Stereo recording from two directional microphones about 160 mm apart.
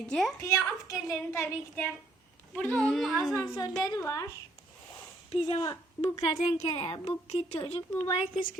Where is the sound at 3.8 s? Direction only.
20° left (ahead or behind).